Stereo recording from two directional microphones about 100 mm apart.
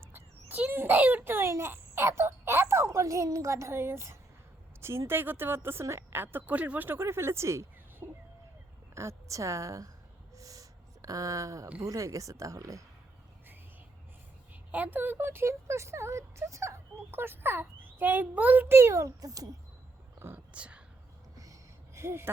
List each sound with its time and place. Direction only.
0.0 s a child's voice: 20° right (ahead or behind)
10.3 s a sound: 35° right (ahead or behind)
11.8 s speech: 35° right (ahead or behind)
14.5 s speech: 15° right (ahead or behind); by 19.5 s 35° right (ahead or behind)
20.1 s speech: 25° right (ahead or behind)
20.5 s speech: 10° right (ahead or behind)
21.3 s a sound: 35° right (ahead or behind)